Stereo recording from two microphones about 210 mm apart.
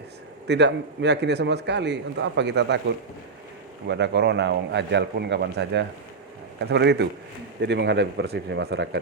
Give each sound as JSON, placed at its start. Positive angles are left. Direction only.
{"t": 0.4, "sound": "a man's voice", "side_deg": -55}
{"t": 3.8, "sound": "a man's voice", "side_deg": -55}